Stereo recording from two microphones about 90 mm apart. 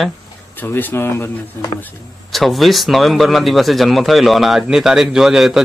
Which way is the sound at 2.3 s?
Centre (ahead or behind).